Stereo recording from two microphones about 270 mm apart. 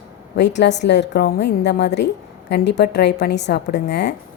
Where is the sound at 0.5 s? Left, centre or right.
Left.